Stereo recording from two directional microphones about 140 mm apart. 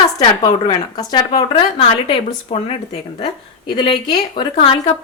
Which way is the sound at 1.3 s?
40° left (ahead or behind).